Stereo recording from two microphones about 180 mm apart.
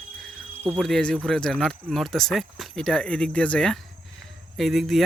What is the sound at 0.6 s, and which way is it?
Speech, 10° right (ahead or behind).